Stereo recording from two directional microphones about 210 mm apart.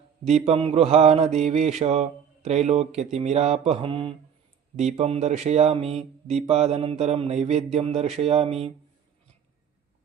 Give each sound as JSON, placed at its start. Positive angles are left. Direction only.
{"t": 0.3, "sound": "mantra", "side_deg": -30}